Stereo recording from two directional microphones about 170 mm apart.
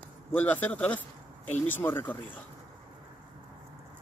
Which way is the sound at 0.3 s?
10° left (ahead or behind).